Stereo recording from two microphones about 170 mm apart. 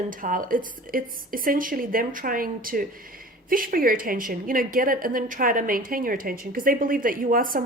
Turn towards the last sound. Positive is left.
turn(degrees=-55)  # may be behind; listen again after turning